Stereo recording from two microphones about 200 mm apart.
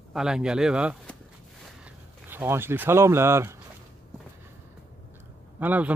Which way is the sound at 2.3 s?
10° right (ahead or behind).